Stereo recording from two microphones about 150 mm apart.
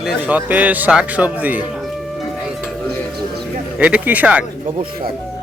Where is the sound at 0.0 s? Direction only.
5° right (ahead or behind).